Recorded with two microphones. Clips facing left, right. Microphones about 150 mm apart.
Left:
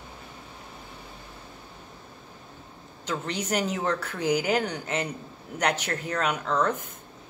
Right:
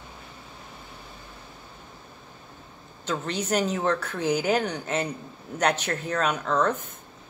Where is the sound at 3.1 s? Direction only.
10° left (ahead or behind).